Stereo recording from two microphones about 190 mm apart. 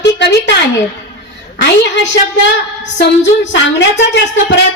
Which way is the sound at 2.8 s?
70° left (ahead or behind).